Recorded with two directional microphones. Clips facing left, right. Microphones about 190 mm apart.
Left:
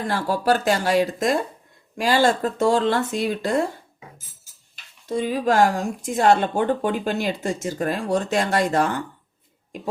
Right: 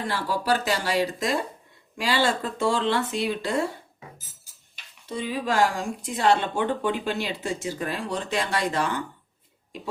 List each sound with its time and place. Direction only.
0.1 s speech: 45° left (ahead or behind)
5.0 s speech: 45° left (ahead or behind)